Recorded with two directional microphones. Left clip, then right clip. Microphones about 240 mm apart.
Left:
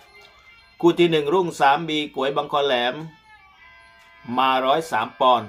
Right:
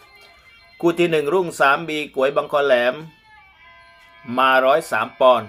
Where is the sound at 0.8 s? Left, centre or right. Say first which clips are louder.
Even; centre.